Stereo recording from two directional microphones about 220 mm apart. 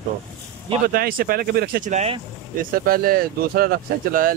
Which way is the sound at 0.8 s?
40° right (ahead or behind).